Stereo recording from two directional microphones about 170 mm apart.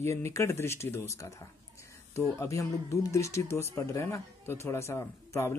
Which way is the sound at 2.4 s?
15° left (ahead or behind).